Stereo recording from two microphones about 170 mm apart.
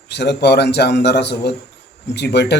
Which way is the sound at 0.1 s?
80° left.